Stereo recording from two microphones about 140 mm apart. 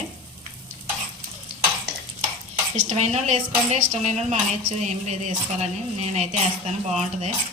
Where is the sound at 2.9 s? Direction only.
50° right (ahead or behind).